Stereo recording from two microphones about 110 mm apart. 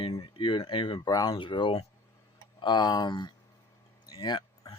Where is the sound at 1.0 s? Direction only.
35° left (ahead or behind).